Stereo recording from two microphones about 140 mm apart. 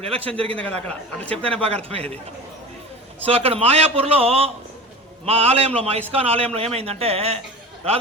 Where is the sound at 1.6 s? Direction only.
45° right (ahead or behind).